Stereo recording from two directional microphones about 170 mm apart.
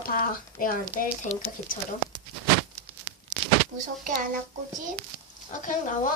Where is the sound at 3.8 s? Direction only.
50° right (ahead or behind).